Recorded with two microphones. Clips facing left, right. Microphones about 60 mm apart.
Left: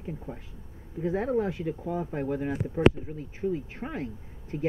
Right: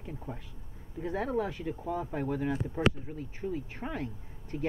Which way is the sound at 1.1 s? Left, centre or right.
Left.